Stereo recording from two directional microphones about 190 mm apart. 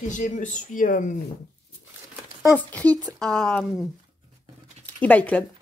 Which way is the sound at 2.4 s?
10° left (ahead or behind).